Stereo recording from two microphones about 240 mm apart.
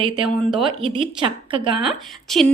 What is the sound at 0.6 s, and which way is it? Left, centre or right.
A woman's voice, right.